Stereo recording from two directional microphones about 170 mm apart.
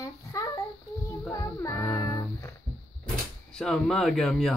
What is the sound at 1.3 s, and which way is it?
Music, 20° left (ahead or behind).